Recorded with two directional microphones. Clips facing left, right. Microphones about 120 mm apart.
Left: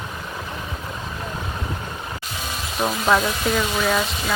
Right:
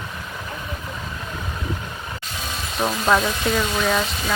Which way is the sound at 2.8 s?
Centre (ahead or behind).